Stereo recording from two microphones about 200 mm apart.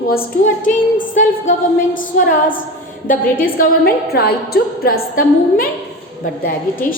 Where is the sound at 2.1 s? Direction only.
45° left (ahead or behind).